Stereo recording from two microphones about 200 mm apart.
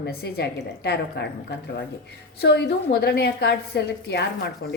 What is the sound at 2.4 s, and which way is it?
A woman's voice, 60° left (ahead or behind).